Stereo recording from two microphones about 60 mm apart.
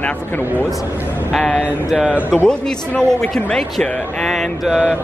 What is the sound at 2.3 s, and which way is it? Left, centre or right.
A man's voice, centre.